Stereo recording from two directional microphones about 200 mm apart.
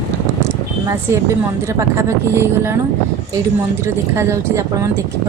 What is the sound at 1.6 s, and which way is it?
Speech, 15° right (ahead or behind).